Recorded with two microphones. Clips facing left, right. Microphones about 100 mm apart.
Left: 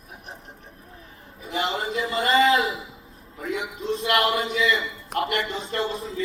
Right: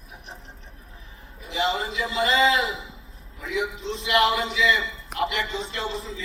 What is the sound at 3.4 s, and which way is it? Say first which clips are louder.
A man's voice: right 1 dB; 50° left (ahead or behind).